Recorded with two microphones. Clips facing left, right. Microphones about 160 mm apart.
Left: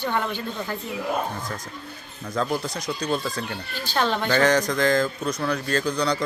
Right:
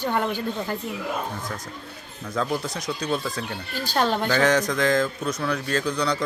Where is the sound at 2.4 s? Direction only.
Centre (ahead or behind).